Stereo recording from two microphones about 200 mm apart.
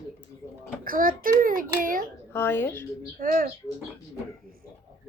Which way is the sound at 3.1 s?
45° right (ahead or behind).